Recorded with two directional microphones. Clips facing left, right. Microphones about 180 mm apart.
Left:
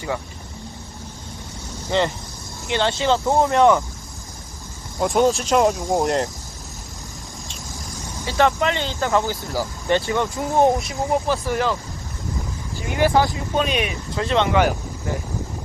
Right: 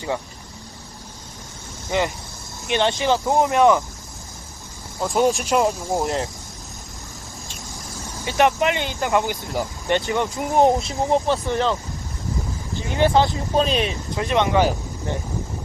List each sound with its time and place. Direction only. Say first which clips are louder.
1.9 s speech: left 2 dB; 15° right (ahead or behind)
4.9 s speech: left 3 dB; centre (ahead or behind)
5.2 s speech: left 1 dB; 10° right (ahead or behind)
8.2 s speech: even; 20° right (ahead or behind)
13.0 s speech: even; 20° right (ahead or behind)
14.2 s speech: left 1 dB; 15° right (ahead or behind)